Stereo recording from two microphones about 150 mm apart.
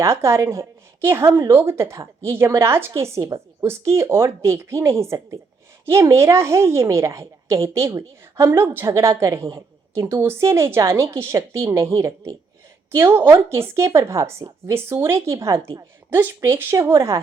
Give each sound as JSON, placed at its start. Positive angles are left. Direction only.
{"t": 0.0, "sound": "a woman's voice", "side_deg": -20}